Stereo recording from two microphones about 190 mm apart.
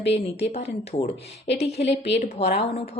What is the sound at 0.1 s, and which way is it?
A woman's voice, 35° left (ahead or behind).